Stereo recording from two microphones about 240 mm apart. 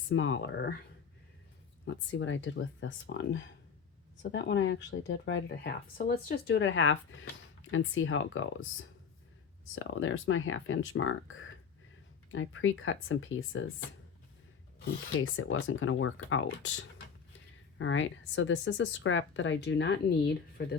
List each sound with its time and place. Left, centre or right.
0.1 s speech: left
1.8 s speech: left
15.2 s speech: left